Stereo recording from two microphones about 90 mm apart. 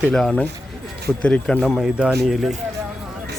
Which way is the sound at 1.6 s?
Centre (ahead or behind).